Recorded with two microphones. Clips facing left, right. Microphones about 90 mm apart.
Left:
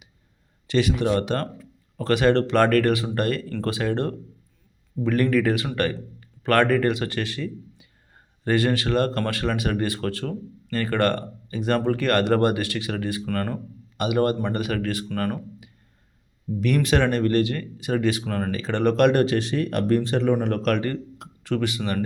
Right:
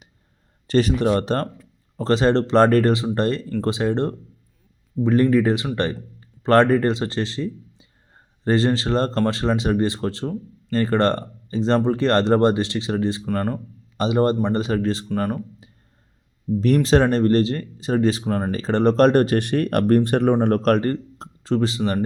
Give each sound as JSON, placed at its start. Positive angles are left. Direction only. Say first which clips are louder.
{"t": 0.7, "sound": "a man's voice", "louder": "right 3 dB", "side_deg": -40}
{"t": 16.6, "sound": "speech", "louder": "right 4 dB", "side_deg": -30}
{"t": 20.3, "sound": "a man's voice", "louder": "right 5 dB", "side_deg": -40}